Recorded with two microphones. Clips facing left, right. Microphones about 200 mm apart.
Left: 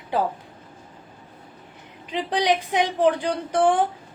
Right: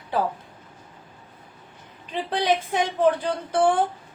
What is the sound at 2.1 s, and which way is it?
A woman's voice, 15° left (ahead or behind).